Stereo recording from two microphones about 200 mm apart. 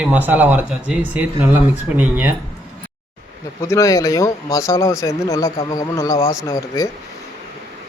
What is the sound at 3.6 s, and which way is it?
Speech, 15° left (ahead or behind).